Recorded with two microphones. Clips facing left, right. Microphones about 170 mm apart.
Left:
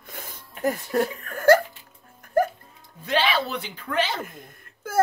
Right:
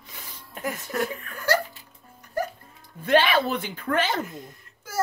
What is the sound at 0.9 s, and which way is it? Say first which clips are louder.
Speech: left 4 dB; 40° left (ahead or behind).